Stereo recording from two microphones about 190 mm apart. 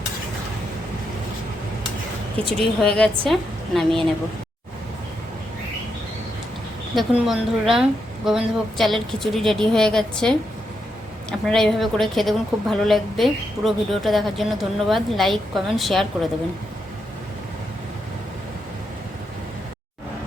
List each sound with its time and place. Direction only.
2.4 s speech: 30° right (ahead or behind)
2.8 s a woman's voice: 5° left (ahead or behind)
6.9 s a woman's voice: centre (ahead or behind)